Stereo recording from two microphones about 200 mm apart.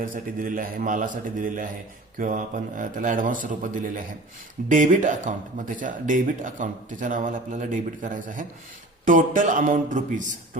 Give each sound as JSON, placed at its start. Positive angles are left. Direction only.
{"t": 0.0, "sound": "a man's voice", "side_deg": -45}